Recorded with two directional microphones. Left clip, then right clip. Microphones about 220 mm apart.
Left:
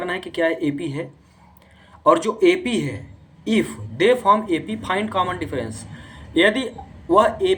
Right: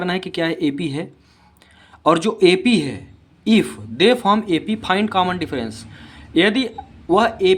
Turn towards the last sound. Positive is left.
turn(degrees=-40)  # may be behind; listen again after turning